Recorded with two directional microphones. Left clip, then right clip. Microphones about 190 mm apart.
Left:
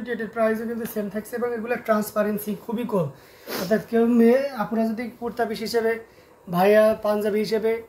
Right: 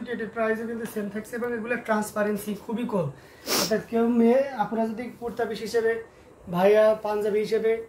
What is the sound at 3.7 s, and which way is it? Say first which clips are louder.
Speech: left 8 dB; 50° left (ahead or behind).